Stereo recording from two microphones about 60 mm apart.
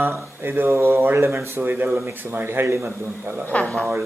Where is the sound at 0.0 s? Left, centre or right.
Right.